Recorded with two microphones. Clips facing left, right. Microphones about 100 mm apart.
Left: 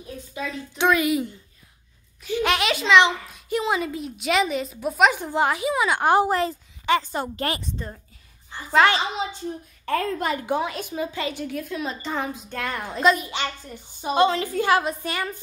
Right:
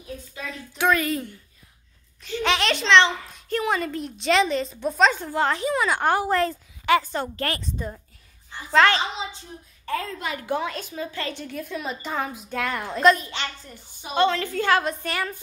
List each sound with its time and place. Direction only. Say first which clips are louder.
0.7 s a woman's voice: left 2 dB; 15° left (ahead or behind)
2.2 s a woman's voice: left 1 dB; 5° left (ahead or behind)
6.0 s a woman's voice: left 4 dB; 15° left (ahead or behind)
7.7 s a woman's voice: right 2 dB; 5° right (ahead or behind)
8.7 s a woman's voice: even; 15° left (ahead or behind)
9.8 s a woman's voice: left 5 dB; 55° left (ahead or behind)
10.4 s a woman's voice: left 2 dB; 15° left (ahead or behind)